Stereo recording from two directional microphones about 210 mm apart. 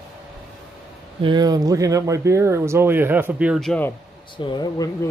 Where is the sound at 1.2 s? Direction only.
20° right (ahead or behind); by 3.9 s 5° left (ahead or behind).